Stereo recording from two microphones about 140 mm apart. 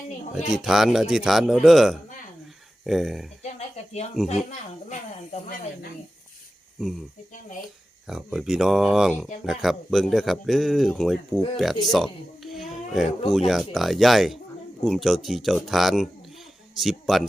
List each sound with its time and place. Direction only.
0.5 s speech: centre (ahead or behind)
4.9 s speech: 75° left (ahead or behind)
6.7 s speech: centre (ahead or behind)
8.0 s speech: 5° right (ahead or behind)
11.9 s a sound: centre (ahead or behind)
13.5 s a man's voice: centre (ahead or behind)